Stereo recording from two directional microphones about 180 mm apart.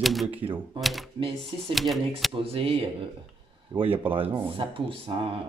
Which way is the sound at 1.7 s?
Centre (ahead or behind).